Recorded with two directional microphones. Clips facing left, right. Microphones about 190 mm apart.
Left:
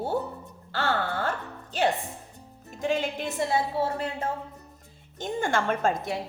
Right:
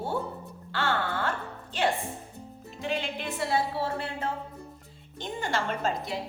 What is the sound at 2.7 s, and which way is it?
Speech, 45° left (ahead or behind).